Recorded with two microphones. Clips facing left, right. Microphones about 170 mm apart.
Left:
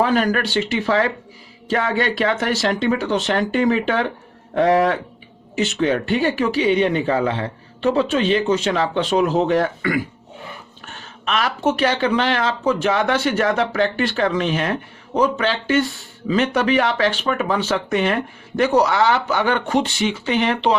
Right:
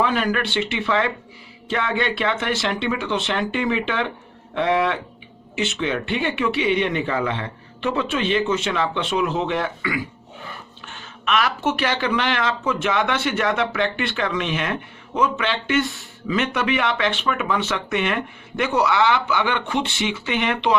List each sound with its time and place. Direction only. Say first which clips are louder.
0.0 s speech: left 3 dB; 40° left (ahead or behind)